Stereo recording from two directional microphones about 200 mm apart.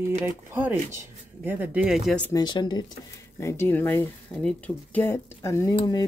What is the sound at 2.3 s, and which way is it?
Speech, 20° left (ahead or behind).